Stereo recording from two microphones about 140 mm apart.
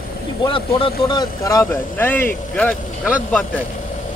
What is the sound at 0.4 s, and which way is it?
Speech, 40° left (ahead or behind).